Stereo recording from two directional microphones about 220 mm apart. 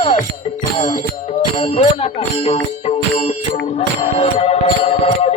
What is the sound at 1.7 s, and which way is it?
Music, 25° left (ahead or behind).